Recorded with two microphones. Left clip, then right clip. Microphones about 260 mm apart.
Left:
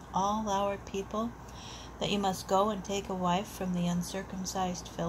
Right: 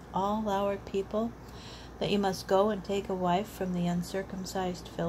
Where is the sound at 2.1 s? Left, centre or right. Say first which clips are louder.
Right 2 dB; right.